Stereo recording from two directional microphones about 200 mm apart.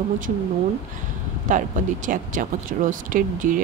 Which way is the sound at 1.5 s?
40° right (ahead or behind).